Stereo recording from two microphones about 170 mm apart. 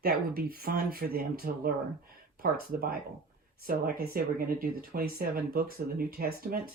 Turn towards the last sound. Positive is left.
turn(degrees=-65)  # may be behind; listen again after turning